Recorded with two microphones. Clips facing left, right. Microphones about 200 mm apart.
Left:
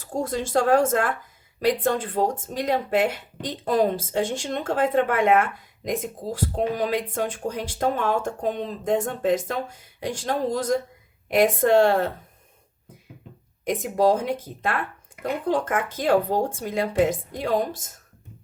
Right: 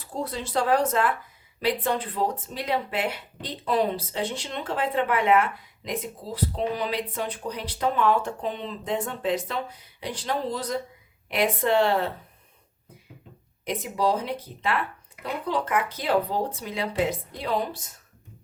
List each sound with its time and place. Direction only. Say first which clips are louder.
0.0 s speech: left 5 dB; 45° left (ahead or behind)
13.7 s speech: left 5 dB; 50° left (ahead or behind)